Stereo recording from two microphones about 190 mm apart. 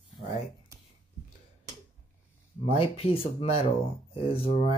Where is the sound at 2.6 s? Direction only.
30° left (ahead or behind).